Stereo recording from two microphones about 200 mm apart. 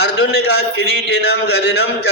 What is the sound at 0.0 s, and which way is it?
A man's voice, 55° left (ahead or behind).